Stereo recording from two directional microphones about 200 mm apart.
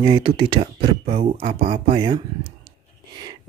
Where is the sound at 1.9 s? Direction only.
20° right (ahead or behind).